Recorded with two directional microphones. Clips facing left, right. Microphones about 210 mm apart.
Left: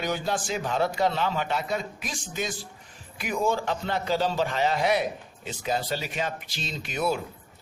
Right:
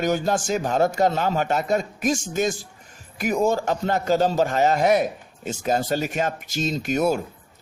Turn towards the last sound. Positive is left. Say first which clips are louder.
# right 6 dB
turn(degrees=-45)  # may be behind; listen again after turning